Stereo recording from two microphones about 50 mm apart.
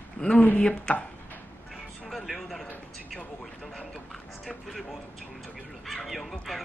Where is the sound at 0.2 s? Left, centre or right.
Left.